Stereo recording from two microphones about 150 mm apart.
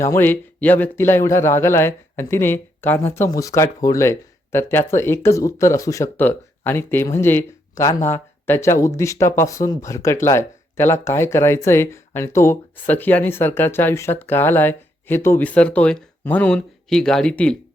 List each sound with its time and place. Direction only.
0.0 s speech: 15° left (ahead or behind)